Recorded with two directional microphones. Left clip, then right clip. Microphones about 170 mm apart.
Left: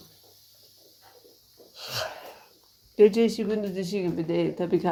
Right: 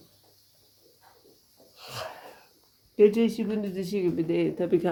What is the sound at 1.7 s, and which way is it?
Wheeze, 15° left (ahead or behind).